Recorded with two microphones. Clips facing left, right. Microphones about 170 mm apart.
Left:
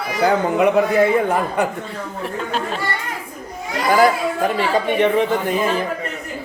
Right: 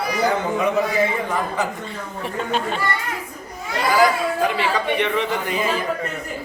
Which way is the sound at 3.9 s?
50° left (ahead or behind).